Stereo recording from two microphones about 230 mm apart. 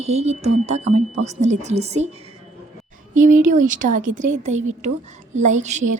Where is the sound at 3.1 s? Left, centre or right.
Right.